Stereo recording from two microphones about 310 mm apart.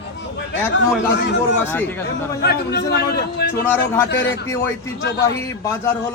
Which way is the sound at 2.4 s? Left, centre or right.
Left.